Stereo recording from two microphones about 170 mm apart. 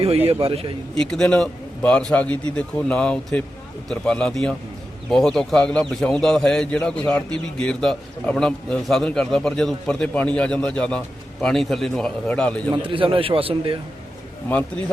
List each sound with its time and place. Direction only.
0.0 s a man's voice: 35° right (ahead or behind)
0.9 s a man's voice: 5° left (ahead or behind)
12.7 s a man's voice: 30° right (ahead or behind)